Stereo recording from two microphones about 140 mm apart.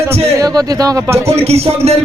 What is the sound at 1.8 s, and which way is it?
Speech, 45° right (ahead or behind).